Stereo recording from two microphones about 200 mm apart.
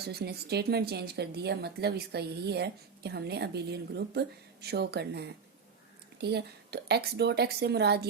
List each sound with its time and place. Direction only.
0.0 s speech: 55° right (ahead or behind)